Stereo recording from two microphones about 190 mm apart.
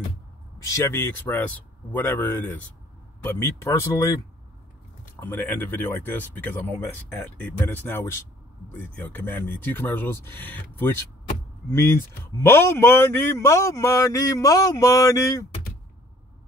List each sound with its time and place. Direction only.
0.7 s speech: 15° left (ahead or behind)
5.2 s speech: 10° left (ahead or behind)